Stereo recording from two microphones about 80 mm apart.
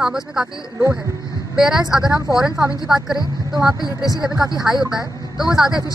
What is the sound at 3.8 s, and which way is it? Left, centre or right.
Speech, left.